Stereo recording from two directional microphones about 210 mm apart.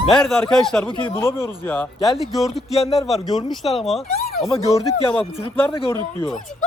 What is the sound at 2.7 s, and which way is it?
Speech, 30° left (ahead or behind).